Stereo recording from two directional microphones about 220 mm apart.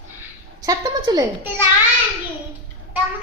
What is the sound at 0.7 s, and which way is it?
Speech, 15° right (ahead or behind).